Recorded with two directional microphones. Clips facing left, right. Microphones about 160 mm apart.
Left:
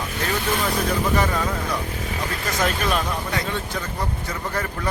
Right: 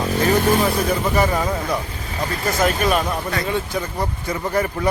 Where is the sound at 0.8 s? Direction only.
10° right (ahead or behind).